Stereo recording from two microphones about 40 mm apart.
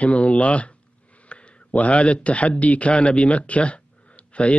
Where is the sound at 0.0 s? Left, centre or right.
Left.